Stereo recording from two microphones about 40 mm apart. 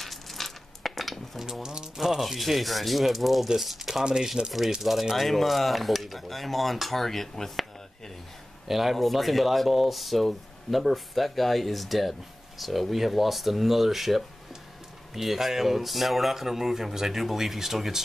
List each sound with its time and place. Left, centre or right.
0.0 s a sound: centre
1.4 s a sound: centre
2.0 s speech: centre
4.0 s speech: centre
5.1 s speech: centre
8.6 s speech: centre